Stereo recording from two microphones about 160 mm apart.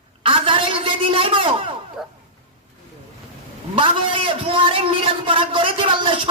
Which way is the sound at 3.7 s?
30° right (ahead or behind).